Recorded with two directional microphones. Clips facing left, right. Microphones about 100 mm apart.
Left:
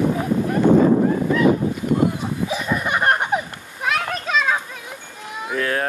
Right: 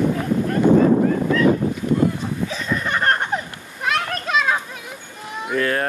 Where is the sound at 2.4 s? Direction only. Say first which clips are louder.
Left 3 dB; 15° left (ahead or behind).